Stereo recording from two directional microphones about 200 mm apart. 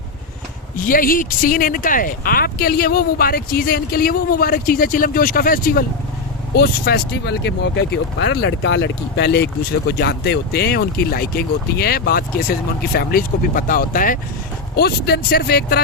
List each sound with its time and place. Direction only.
0.9 s speech: 45° left (ahead or behind)